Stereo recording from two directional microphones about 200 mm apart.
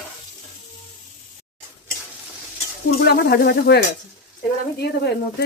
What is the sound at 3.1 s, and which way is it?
Speech, 55° left (ahead or behind).